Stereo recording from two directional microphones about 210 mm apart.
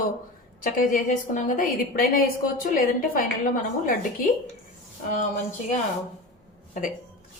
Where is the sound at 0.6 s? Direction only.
40° left (ahead or behind).